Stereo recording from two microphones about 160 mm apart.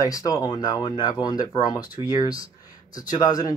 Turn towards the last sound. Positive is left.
turn(degrees=25)  # may be behind; listen again after turning